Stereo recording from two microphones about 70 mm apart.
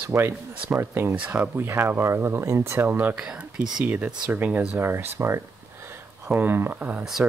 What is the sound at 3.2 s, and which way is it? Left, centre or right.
Speech, centre.